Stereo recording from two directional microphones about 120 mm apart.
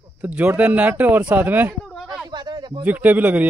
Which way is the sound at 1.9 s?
5° left (ahead or behind).